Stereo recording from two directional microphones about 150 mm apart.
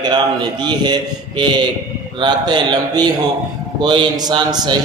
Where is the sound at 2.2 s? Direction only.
30° right (ahead or behind).